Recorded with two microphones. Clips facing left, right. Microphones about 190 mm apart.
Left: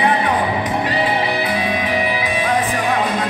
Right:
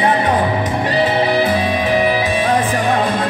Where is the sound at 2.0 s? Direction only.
40° right (ahead or behind).